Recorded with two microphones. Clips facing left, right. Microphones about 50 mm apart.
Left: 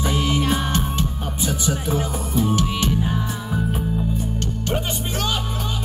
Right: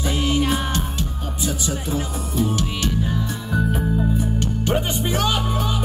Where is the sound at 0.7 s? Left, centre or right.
Left.